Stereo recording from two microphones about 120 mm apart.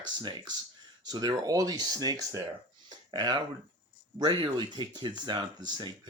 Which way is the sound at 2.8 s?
40° right (ahead or behind).